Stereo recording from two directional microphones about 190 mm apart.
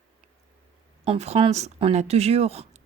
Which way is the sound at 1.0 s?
30° right (ahead or behind).